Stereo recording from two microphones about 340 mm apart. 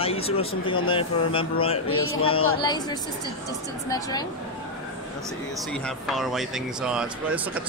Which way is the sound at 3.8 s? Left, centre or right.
Centre.